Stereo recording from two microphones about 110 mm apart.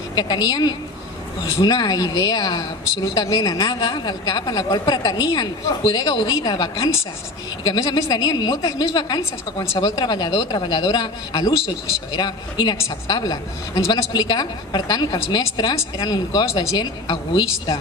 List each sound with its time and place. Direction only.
0.1 s a woman's voice: 40° left (ahead or behind)
14.1 s a woman's voice: 40° left (ahead or behind)